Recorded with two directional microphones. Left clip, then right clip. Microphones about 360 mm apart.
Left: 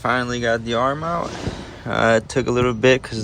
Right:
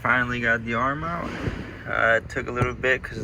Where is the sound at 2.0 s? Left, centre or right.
Left.